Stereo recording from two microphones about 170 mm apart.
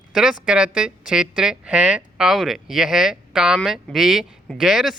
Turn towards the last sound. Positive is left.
turn(degrees=-5)  # may be behind; listen again after turning